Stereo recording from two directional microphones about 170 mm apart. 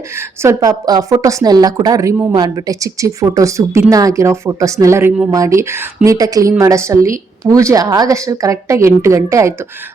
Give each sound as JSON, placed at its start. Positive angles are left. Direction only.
{"t": 0.2, "sound": "a woman's voice", "side_deg": -20}